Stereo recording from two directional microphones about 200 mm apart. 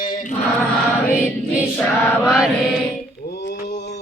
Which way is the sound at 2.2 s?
Centre (ahead or behind).